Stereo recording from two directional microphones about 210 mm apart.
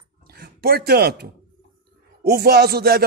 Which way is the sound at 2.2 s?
45° right (ahead or behind).